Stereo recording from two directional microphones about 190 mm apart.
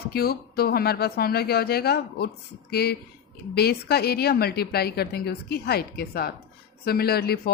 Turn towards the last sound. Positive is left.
turn(degrees=55)  # may be behind; listen again after turning